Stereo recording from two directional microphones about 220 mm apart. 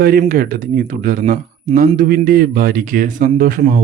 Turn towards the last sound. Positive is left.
turn(degrees=-40)  # may be behind; listen again after turning